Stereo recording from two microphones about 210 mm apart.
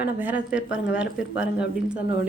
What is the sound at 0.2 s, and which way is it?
Speech, 5° right (ahead or behind).